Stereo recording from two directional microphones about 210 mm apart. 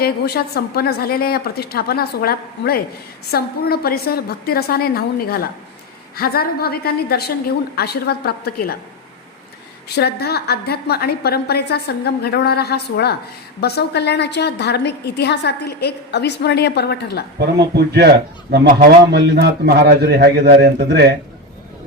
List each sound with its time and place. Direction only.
0.0 s a woman's voice: 50° left (ahead or behind)
9.9 s a woman's voice: 50° left (ahead or behind)
17.4 s a man's voice: 50° right (ahead or behind)